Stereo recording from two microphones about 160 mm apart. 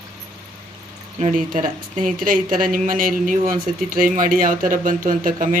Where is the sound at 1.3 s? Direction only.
55° right (ahead or behind).